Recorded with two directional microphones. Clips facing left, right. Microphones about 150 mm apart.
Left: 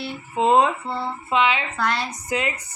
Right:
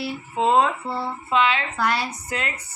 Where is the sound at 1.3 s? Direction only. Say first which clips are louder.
Even; 10° left (ahead or behind).